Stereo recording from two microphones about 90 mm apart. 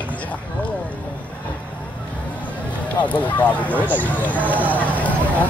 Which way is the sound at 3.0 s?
15° left (ahead or behind).